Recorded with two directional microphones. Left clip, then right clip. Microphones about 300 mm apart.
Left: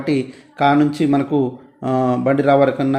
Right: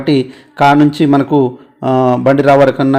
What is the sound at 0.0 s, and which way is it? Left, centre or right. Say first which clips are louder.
Speech: right 7 dB; centre.